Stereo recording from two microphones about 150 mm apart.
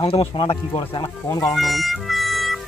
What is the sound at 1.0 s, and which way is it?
Speech, 20° left (ahead or behind).